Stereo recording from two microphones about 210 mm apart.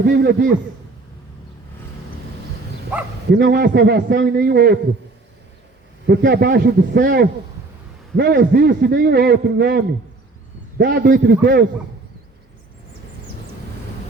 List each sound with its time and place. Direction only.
0.0 s a man's voice: 50° right (ahead or behind)
2.9 s speech: 5° right (ahead or behind)
3.2 s a man's voice: 50° right (ahead or behind)
6.1 s a man's voice: 50° right (ahead or behind)
10.8 s a man's voice: 45° right (ahead or behind)